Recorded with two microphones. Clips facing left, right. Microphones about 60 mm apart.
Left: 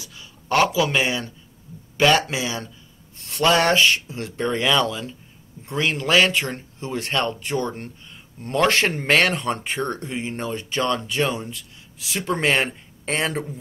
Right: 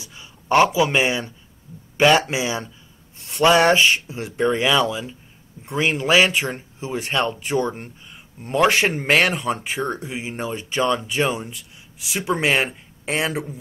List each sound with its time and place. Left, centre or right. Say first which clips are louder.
0.0 s speech: right 1 dB; right; by 13.6 s centre